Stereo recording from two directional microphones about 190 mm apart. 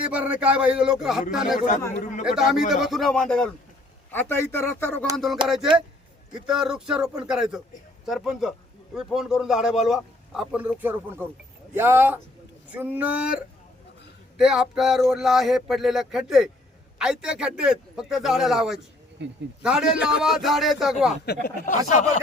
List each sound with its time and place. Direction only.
0.0 s a man's voice: 5° right (ahead or behind)
1.9 s speech: 40° left (ahead or behind)
2.2 s a man's voice: centre (ahead or behind)
5.1 s a man's voice: centre (ahead or behind)
6.4 s a man's voice: 5° right (ahead or behind)
14.3 s a man's voice: 5° right (ahead or behind)
19.2 s speech: 70° right (ahead or behind)
19.6 s a man's voice: 5° right (ahead or behind)
21.3 s speech: 60° left (ahead or behind)
21.8 s speech: 40° left (ahead or behind)